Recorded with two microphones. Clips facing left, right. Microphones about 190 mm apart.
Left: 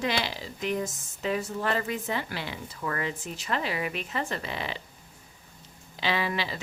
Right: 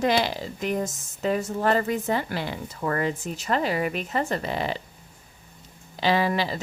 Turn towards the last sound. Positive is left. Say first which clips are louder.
# right 6 dB
turn(degrees=-40)  # may be behind; listen again after turning